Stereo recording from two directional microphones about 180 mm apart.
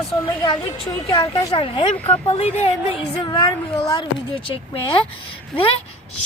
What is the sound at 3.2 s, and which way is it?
Speech, 25° left (ahead or behind).